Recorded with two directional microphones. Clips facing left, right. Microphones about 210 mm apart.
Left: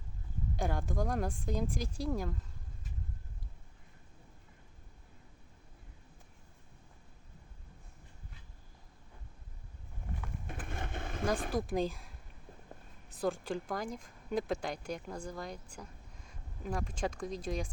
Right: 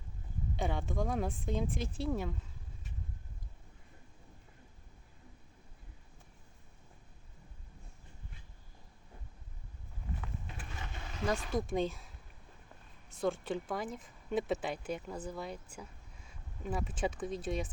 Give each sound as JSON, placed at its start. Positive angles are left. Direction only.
{"t": 0.5, "sound": "speech", "side_deg": 0}
{"t": 10.4, "sound": "vehicle", "side_deg": 55}
{"t": 11.5, "sound": "speech", "side_deg": 0}
{"t": 13.1, "sound": "speech", "side_deg": 0}